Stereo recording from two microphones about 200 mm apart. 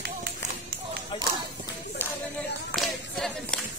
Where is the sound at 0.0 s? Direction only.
50° right (ahead or behind).